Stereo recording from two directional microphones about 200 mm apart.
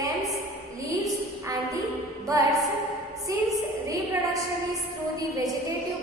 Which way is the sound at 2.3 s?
15° right (ahead or behind).